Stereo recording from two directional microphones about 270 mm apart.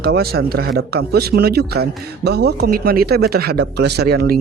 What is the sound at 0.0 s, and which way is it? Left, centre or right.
Speech, right.